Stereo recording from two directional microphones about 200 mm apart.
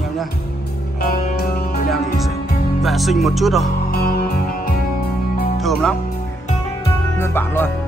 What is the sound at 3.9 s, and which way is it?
Music, 50° left (ahead or behind).